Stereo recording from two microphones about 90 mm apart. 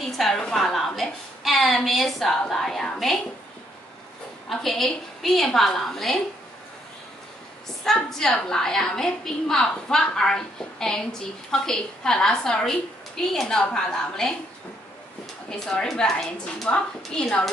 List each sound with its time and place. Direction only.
0.2 s a woman's voice: 5° left (ahead or behind)
4.5 s a woman's voice: 5° left (ahead or behind)
7.8 s a woman's voice: 5° left (ahead or behind)
15.6 s a woman's voice: 5° left (ahead or behind)